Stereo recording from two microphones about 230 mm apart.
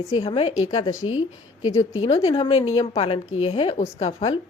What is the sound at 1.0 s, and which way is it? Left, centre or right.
Speech, left.